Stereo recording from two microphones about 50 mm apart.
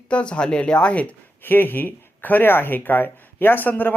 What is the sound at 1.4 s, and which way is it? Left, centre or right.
Speech, left.